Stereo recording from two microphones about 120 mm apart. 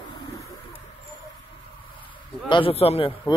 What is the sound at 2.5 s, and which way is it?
Speech, 45° left (ahead or behind).